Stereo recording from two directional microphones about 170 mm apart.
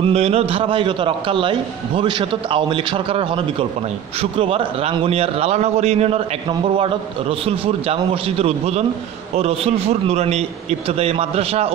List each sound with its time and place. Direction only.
0.0 s a man's voice: 35° right (ahead or behind)